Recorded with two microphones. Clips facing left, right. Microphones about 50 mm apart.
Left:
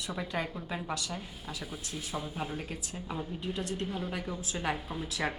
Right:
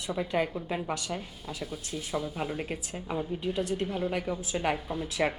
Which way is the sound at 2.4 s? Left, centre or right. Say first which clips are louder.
Right 4 dB; centre.